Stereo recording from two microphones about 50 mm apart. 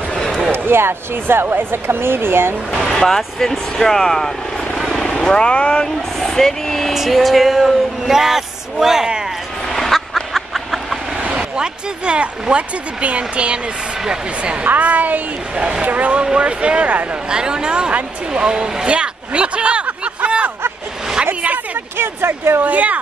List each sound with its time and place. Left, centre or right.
0.1 s a sound: centre
0.5 s speech: right
2.9 s speech: centre
4.7 s vehicle: centre
5.2 s speech: centre
6.1 s speech: centre
6.9 s speech: centre
9.7 s duck: centre
10.3 s a sound: centre
11.3 s speech: centre; by 15.2 s right
15.5 s speech: right
21.9 s speech: right
22.6 s speech: right